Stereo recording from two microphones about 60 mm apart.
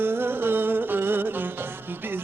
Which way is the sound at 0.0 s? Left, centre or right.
Right.